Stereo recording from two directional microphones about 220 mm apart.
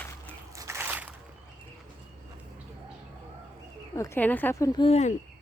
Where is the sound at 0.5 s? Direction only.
15° right (ahead or behind).